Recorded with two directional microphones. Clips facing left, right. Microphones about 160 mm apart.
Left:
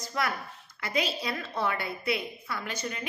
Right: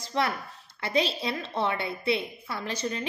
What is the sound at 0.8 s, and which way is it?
A woman's voice, 30° right (ahead or behind).